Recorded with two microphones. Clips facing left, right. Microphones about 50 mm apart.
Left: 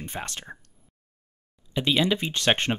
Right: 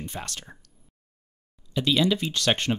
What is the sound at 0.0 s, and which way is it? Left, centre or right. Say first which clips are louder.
Speech: left 1 dB; left.